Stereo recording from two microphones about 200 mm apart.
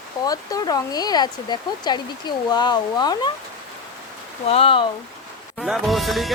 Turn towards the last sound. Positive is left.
turn(degrees=0)  # may be behind; listen again after turning